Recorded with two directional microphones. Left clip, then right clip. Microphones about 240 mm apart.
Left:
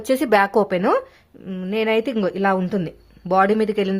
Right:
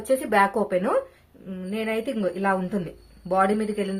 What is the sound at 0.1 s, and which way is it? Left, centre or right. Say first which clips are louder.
Speech: left 4 dB; left.